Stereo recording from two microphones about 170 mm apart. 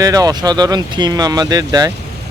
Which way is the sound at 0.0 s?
20° right (ahead or behind).